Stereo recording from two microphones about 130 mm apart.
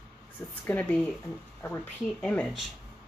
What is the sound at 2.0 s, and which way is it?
Speech, 5° left (ahead or behind).